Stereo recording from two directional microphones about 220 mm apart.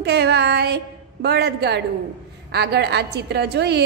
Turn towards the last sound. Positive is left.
turn(degrees=-50)  # may be behind; listen again after turning